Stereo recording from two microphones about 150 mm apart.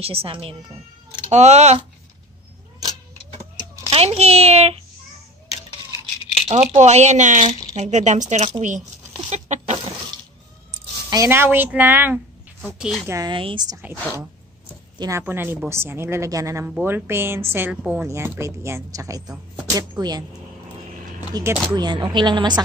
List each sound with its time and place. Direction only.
0.0 s a woman's voice: 40° right (ahead or behind)
1.3 s speech: 50° right (ahead or behind)
3.9 s speech: 45° right (ahead or behind)
6.4 s speech: 45° right (ahead or behind)
9.3 s a sound: 50° right (ahead or behind)
11.1 s speech: 20° right (ahead or behind)
12.6 s a woman's voice: centre (ahead or behind)
13.0 s speech: 20° right (ahead or behind)
13.3 s a woman's voice: 35° right (ahead or behind)
15.0 s speech: 20° right (ahead or behind)
21.3 s a woman's voice: 25° right (ahead or behind)